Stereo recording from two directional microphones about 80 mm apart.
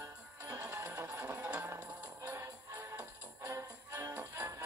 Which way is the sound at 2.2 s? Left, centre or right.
Right.